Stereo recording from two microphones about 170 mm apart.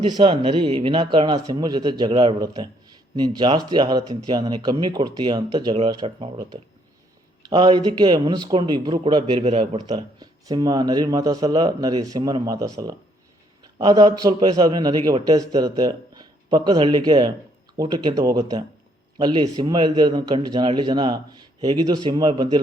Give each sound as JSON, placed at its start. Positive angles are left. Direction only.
{"t": 0.0, "sound": "a man's voice", "side_deg": -30}
{"t": 9.4, "sound": "a man's voice", "side_deg": -40}
{"t": 10.2, "sound": "a man's voice", "side_deg": -25}